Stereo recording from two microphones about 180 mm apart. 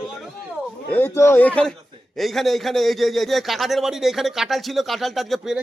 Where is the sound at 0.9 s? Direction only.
15° left (ahead or behind).